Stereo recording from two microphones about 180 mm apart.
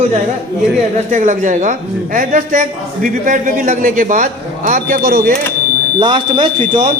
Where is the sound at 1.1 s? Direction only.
45° right (ahead or behind).